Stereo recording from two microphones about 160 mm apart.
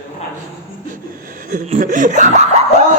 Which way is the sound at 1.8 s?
55° right (ahead or behind).